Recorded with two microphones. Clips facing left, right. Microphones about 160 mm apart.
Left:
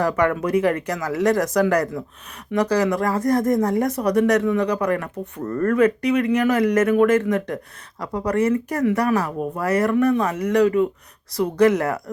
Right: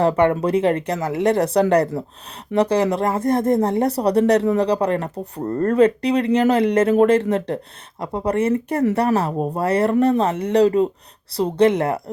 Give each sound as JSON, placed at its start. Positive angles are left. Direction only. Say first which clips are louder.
{"t": 0.0, "sound": "speech", "louder": "right 3 dB", "side_deg": -30}